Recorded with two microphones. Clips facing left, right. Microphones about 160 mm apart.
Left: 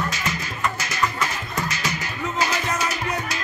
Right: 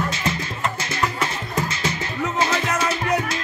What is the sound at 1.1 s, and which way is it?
Music, 30° right (ahead or behind).